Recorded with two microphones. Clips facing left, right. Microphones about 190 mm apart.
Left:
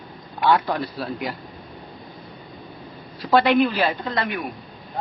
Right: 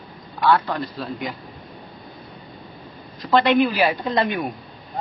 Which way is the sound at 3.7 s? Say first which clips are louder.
Right 3 dB; 10° right (ahead or behind).